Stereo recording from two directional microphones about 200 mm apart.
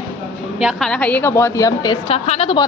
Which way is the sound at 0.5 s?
Centre (ahead or behind).